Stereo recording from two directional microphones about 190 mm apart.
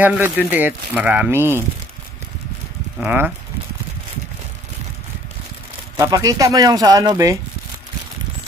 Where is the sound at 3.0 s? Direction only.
10° right (ahead or behind).